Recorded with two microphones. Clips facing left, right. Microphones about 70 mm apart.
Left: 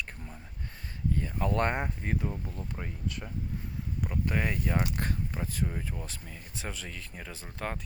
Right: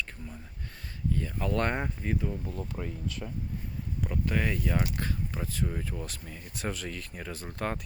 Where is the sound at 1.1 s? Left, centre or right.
Left.